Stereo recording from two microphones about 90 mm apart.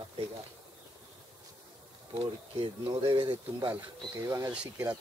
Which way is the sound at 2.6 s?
65° right (ahead or behind).